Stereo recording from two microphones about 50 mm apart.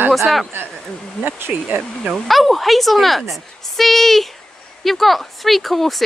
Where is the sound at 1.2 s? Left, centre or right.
Right.